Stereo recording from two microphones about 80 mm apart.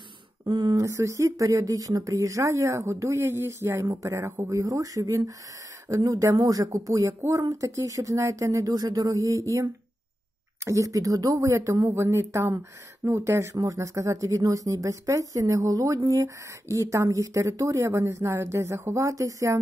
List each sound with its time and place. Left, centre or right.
0.5 s a sound: right
0.8 s speech: right
10.6 s speech: right